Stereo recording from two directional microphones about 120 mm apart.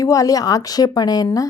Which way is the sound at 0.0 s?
30° left (ahead or behind).